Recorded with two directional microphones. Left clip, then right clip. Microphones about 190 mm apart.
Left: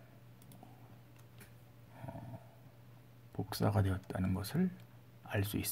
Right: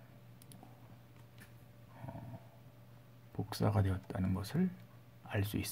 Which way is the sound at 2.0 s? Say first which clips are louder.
Left 1 dB; 5° left (ahead or behind).